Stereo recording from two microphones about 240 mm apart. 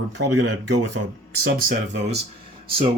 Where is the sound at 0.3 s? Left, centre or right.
Right.